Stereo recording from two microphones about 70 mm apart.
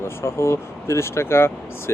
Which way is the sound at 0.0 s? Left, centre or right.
Left.